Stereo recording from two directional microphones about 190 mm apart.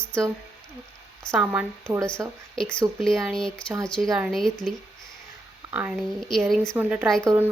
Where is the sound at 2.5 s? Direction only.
5° left (ahead or behind).